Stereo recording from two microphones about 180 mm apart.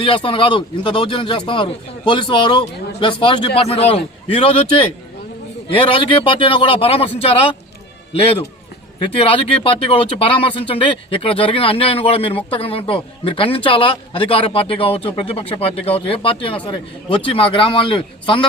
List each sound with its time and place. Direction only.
0.0 s speech: 30° left (ahead or behind)
6.0 s speech: 30° left (ahead or behind)
9.0 s speech: 30° left (ahead or behind)